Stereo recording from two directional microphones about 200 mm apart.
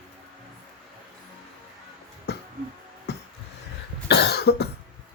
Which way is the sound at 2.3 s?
55° left (ahead or behind).